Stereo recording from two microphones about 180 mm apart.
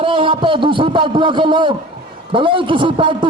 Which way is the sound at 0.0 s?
30° right (ahead or behind).